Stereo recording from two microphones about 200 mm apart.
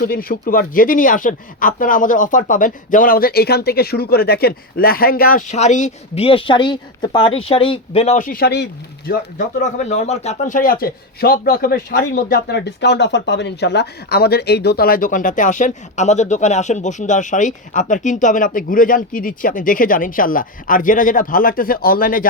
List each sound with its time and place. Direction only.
0.0 s speech: 45° left (ahead or behind)
9.7 s speech: 35° left (ahead or behind)
12.5 s speech: 60° left (ahead or behind)